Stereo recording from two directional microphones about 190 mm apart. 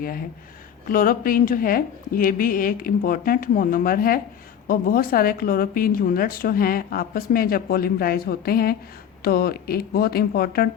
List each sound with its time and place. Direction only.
0.9 s a woman's voice: 50° left (ahead or behind)